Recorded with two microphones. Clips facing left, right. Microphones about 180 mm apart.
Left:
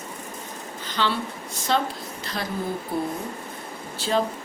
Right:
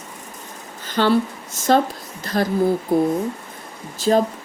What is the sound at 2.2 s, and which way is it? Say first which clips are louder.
Speech: right 11 dB; 50° right (ahead or behind).